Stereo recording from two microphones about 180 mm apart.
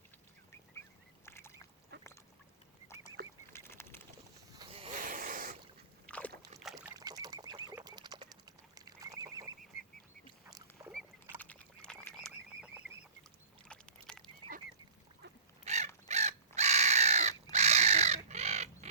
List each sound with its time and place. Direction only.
1.2 s duck: 15° left (ahead or behind)
1.9 s duck: 70° right (ahead or behind)
3.2 s duck: 60° right (ahead or behind)
3.5 s duck: 15° left (ahead or behind)
4.5 s a sound: 30° right (ahead or behind)
4.9 s a sound: 50° right (ahead or behind)
6.1 s slosh: 5° left (ahead or behind)
6.8 s chicken: 20° right (ahead or behind)
7.9 s livestock: 25° right (ahead or behind)
10.8 s rowboat: 20° right (ahead or behind)
11.3 s frog: 5° left (ahead or behind)
13.7 s a sound: 5° left (ahead or behind)
15.6 s crow: 40° right (ahead or behind)